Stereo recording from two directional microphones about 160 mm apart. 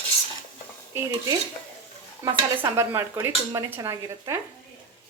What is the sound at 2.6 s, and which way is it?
Speech, 15° right (ahead or behind).